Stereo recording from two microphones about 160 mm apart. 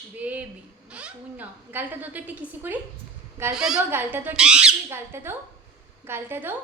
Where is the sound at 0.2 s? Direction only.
10° right (ahead or behind).